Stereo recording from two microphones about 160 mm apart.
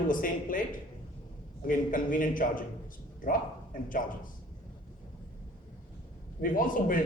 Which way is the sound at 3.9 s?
55° left (ahead or behind).